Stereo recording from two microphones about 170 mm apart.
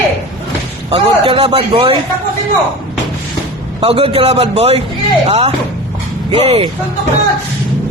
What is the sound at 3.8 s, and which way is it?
A man's voice, 35° right (ahead or behind).